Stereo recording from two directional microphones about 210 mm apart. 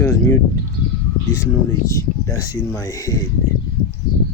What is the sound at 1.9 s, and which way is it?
Speech, 15° left (ahead or behind).